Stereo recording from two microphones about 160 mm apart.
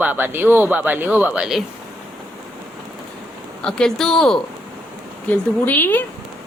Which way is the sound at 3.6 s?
5° left (ahead or behind).